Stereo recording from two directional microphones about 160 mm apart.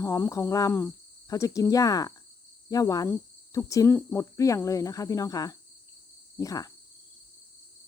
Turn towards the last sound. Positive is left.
turn(degrees=20)  # may be behind; listen again after turning